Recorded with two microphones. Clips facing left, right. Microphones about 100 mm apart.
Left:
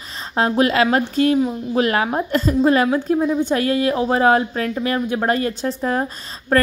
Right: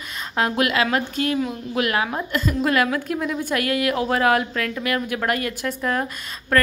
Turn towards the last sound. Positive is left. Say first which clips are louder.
# left 4 dB
turn(degrees=25)  # may be behind; listen again after turning